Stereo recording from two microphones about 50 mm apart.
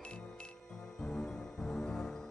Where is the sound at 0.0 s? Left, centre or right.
Left.